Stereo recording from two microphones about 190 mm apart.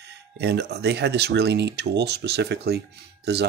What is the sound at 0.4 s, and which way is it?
Speech, 60° right (ahead or behind).